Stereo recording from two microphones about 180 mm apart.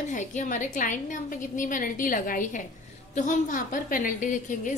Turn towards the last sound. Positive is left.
turn(degrees=45)  # may be behind; listen again after turning